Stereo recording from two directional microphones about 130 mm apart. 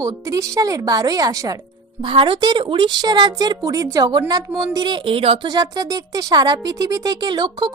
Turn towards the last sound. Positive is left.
turn(degrees=-35)  # may be behind; listen again after turning